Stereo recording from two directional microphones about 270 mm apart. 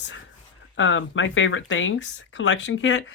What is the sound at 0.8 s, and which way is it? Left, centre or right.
Speech, left.